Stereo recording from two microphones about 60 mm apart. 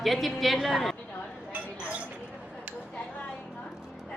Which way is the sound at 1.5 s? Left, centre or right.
Right.